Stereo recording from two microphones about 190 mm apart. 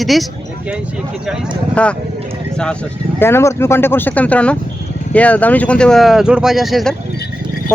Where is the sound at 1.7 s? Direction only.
5° left (ahead or behind).